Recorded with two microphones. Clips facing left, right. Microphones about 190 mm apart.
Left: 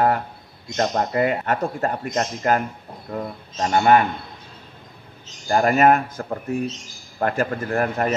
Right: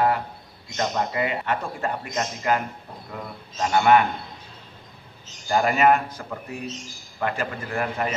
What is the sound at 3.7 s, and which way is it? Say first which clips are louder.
Speech: left 2 dB; 40° left (ahead or behind).